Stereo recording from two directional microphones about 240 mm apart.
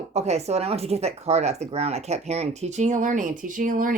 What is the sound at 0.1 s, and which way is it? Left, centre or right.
Speech, right.